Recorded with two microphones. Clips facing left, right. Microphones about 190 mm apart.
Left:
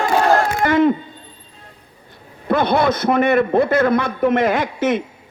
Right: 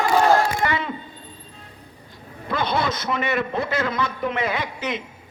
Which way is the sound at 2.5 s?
55° left (ahead or behind).